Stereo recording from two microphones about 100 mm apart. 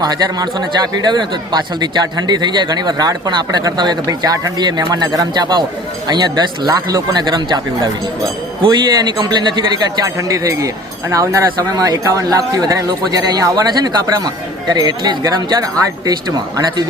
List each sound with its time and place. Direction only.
0.0 s speech: 40° right (ahead or behind)
10.2 s speech: 35° right (ahead or behind)